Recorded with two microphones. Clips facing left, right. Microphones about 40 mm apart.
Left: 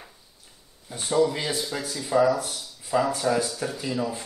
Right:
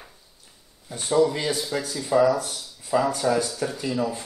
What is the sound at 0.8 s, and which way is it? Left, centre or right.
Speech, centre.